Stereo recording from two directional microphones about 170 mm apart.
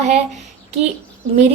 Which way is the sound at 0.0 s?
40° right (ahead or behind).